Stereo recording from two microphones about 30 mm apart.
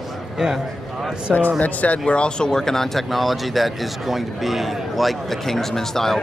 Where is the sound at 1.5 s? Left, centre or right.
Left.